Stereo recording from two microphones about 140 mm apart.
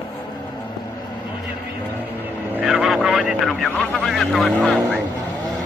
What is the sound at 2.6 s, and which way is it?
Vehicle, centre (ahead or behind).